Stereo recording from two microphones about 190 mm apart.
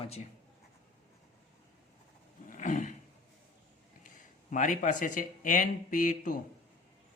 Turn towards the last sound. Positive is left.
turn(degrees=45)  # may be behind; listen again after turning